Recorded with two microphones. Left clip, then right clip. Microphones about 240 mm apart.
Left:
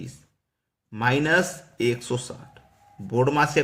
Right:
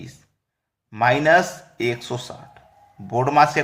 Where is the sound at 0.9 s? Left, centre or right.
Centre.